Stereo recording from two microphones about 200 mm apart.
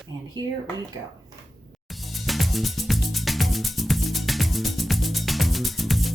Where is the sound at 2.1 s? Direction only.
Centre (ahead or behind).